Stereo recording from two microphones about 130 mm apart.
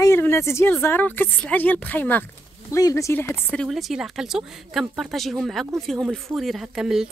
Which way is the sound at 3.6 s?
Centre (ahead or behind).